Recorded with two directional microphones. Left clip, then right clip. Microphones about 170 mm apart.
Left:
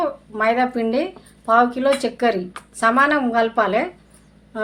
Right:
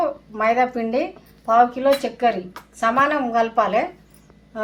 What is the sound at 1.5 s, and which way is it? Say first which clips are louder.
A woman's voice: even; 50° left (ahead or behind).